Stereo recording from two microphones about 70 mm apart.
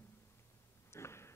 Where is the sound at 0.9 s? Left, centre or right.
Left.